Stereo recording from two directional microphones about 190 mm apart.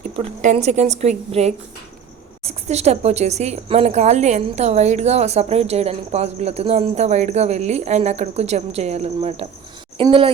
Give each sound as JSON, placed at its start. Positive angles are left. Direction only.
{"t": 0.2, "sound": "speech", "side_deg": -35}